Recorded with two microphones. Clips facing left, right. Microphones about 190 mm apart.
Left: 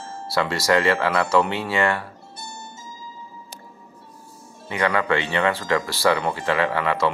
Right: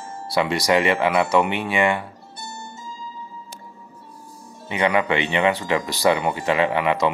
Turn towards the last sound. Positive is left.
turn(degrees=-20)  # may be behind; listen again after turning